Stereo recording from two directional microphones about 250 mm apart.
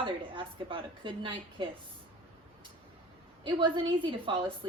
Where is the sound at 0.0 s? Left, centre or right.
Centre.